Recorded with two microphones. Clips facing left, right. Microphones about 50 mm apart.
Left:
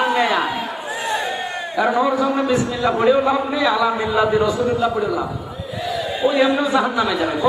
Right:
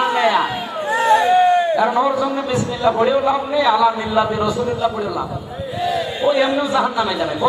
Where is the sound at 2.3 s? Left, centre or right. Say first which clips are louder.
Left 2 dB; centre.